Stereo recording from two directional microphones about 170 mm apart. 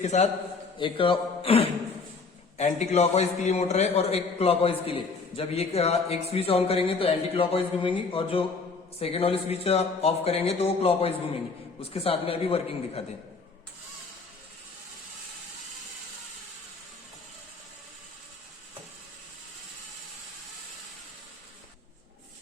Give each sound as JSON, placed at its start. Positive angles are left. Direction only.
{"t": 0.0, "sound": "a man's voice", "side_deg": 40}
{"t": 0.8, "sound": "a man's voice", "side_deg": 30}